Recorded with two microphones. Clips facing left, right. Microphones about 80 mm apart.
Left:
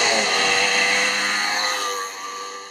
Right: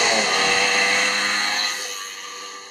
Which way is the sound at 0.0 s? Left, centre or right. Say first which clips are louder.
Even; centre.